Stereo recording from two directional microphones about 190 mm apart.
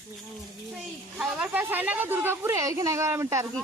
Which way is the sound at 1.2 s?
5° right (ahead or behind).